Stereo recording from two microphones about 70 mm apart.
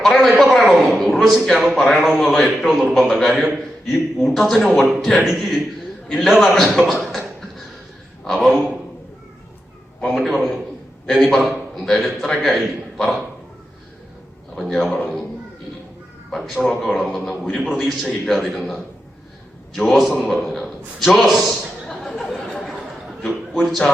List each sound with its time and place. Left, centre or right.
0.0 s a sound: centre
2.1 s a man's voice: centre
8.3 s a man's voice: centre
10.0 s a man's voice: centre
14.8 s a man's voice: centre
16.3 s a man's voice: centre
22.0 s chatter: centre
23.2 s a man's voice: centre